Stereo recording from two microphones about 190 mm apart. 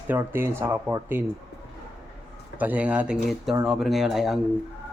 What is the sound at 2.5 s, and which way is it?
A man's voice, 10° right (ahead or behind).